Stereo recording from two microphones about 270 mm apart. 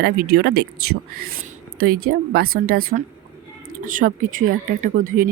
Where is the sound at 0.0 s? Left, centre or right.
Right.